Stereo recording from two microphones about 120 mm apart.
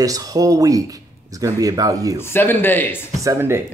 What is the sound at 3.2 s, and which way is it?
Speech, 20° right (ahead or behind).